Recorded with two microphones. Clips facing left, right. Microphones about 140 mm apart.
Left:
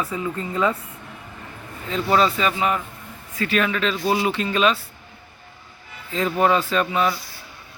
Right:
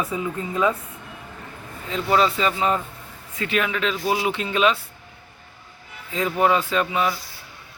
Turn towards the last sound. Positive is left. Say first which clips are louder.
# left 1 dB
turn(degrees=-15)  # may be behind; listen again after turning